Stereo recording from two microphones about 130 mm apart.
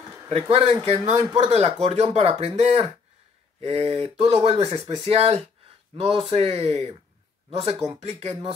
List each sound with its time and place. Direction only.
0.3 s speech: 50° right (ahead or behind)